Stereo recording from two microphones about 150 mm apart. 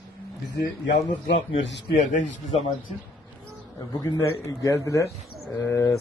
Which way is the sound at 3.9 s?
20° left (ahead or behind).